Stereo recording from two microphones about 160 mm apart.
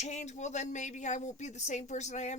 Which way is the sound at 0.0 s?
45° left (ahead or behind).